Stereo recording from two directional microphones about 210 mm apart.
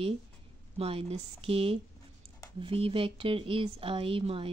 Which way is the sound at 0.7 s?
30° right (ahead or behind).